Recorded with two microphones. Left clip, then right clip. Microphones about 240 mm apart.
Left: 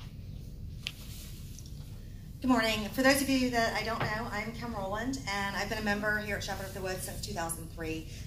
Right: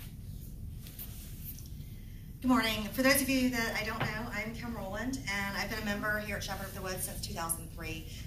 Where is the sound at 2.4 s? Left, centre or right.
Right.